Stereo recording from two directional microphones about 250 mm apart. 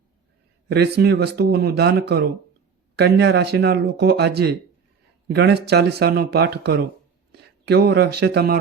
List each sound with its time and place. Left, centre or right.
0.7 s speech: right